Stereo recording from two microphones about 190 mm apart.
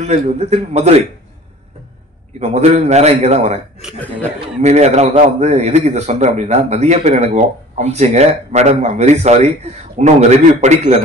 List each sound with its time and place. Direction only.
0.0 s a man's voice: 35° right (ahead or behind)
2.4 s a man's voice: 35° right (ahead or behind)
3.8 s speech: 5° right (ahead or behind)
4.6 s a man's voice: 35° right (ahead or behind)